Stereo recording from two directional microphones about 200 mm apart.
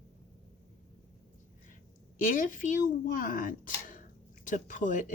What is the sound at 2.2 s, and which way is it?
Speech, 40° left (ahead or behind).